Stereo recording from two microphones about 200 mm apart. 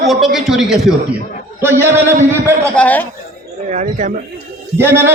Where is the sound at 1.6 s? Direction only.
10° right (ahead or behind).